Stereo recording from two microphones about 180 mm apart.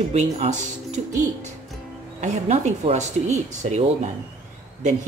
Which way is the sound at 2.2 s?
40° right (ahead or behind).